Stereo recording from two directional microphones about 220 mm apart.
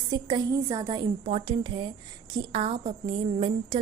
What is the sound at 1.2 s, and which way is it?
A woman's voice, 30° right (ahead or behind).